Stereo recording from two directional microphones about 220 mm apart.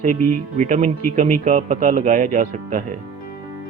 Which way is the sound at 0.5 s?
30° right (ahead or behind).